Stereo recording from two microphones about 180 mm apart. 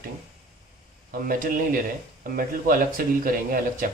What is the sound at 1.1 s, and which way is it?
Speech, 50° right (ahead or behind).